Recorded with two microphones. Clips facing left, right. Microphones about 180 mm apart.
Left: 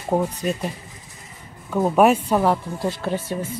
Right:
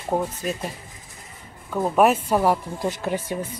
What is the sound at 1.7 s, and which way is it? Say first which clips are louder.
Speech: left 2 dB; 5° left (ahead or behind).